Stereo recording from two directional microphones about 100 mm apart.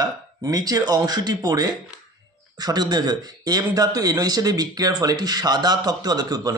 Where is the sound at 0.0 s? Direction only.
40° right (ahead or behind).